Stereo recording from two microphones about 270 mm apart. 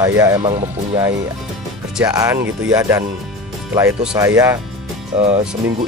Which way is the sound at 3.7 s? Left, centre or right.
Centre.